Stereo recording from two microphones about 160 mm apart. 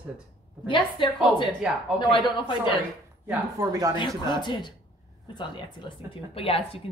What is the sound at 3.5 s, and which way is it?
Speech, 20° right (ahead or behind).